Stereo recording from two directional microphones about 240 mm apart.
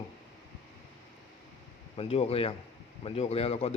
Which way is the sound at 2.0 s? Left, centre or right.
Left.